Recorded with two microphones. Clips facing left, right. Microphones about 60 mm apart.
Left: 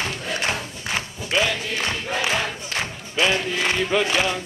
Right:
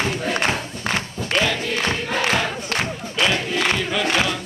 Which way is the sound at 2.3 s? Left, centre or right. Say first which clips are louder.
Right 3 dB; right.